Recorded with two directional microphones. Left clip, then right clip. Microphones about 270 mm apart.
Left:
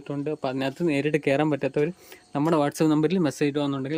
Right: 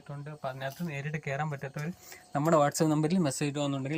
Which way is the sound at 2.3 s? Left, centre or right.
Centre.